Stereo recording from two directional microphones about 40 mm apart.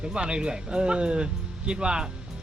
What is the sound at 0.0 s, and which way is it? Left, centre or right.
A man's voice, right.